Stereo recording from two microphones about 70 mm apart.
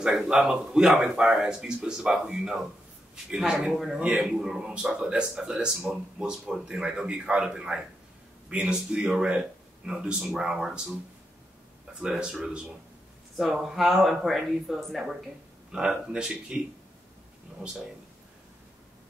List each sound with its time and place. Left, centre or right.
0.0 s speech: centre
12.0 s speech: centre
15.7 s speech: centre